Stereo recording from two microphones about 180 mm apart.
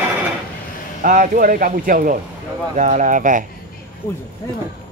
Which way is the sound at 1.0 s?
50° right (ahead or behind).